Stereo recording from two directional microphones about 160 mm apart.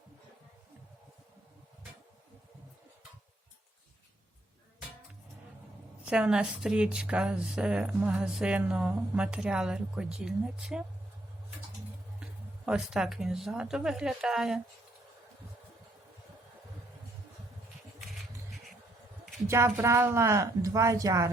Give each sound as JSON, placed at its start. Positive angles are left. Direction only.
{"t": 6.1, "sound": "speech", "side_deg": -5}
{"t": 12.6, "sound": "speech", "side_deg": -5}
{"t": 19.5, "sound": "a woman's voice", "side_deg": -15}